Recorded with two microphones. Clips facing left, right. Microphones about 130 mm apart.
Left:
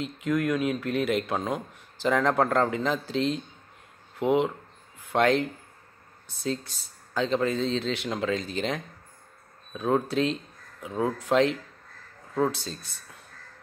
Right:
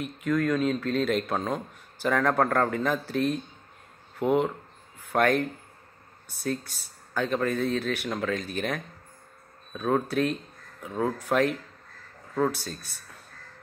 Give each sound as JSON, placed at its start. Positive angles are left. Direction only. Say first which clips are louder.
{"t": 0.0, "sound": "speech", "louder": "even", "side_deg": 20}